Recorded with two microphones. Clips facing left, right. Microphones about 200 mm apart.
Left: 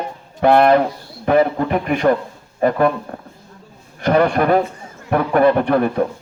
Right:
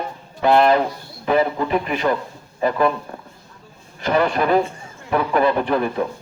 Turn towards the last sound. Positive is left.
turn(degrees=55)  # may be behind; listen again after turning